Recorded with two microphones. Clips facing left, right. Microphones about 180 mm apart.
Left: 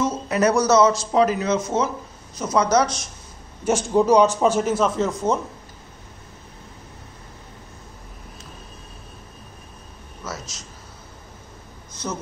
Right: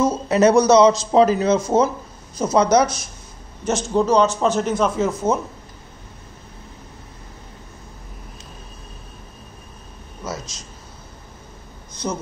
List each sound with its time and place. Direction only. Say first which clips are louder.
0.0 s a man's voice: right 4 dB; 25° right (ahead or behind)
1.1 s speech: right 4 dB; 30° right (ahead or behind)
2.8 s speech: right 2 dB; 5° right (ahead or behind)
3.6 s a man's voice: left 1 dB; 10° left (ahead or behind)